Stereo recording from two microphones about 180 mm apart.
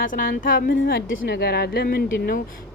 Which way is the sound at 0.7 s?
90° left.